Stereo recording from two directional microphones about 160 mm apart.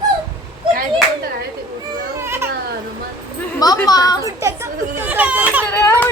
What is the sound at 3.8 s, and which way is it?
Speech, 25° left (ahead or behind).